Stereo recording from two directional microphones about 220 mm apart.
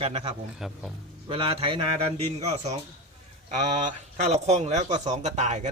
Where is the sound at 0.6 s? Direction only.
Centre (ahead or behind).